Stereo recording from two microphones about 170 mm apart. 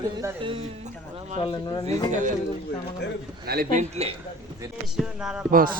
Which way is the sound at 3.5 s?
60° right (ahead or behind).